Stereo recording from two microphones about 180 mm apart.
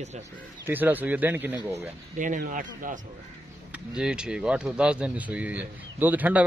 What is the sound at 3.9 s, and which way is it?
Speech, 5° right (ahead or behind).